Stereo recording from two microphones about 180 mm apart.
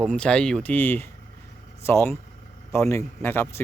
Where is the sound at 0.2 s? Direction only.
5° left (ahead or behind).